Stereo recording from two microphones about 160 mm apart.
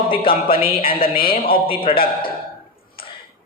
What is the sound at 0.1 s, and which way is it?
Speech, 35° left (ahead or behind).